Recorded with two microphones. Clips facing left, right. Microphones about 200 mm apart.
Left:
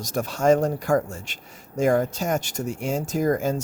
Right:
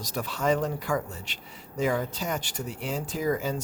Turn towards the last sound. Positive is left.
turn(degrees=45)  # may be behind; listen again after turning